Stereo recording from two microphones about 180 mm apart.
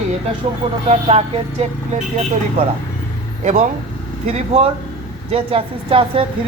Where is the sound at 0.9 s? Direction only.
35° right (ahead or behind).